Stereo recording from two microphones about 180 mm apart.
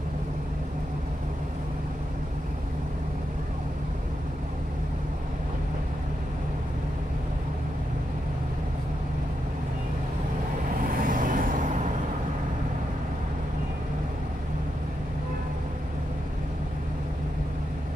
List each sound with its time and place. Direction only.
10.8 s vehicle: 50° right (ahead or behind)